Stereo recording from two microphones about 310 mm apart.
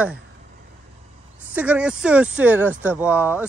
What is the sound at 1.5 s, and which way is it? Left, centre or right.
Speech, centre.